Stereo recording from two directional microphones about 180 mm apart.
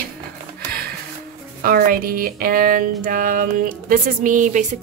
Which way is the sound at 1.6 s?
55° right (ahead or behind).